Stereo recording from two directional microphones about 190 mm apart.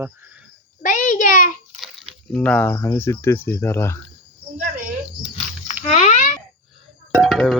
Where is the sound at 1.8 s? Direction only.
Centre (ahead or behind).